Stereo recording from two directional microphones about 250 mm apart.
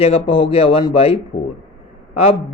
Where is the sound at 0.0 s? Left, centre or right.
Left.